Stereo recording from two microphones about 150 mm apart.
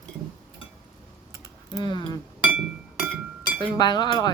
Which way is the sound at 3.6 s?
30° left (ahead or behind).